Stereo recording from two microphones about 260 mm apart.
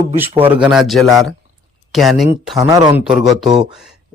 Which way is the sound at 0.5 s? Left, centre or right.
Centre.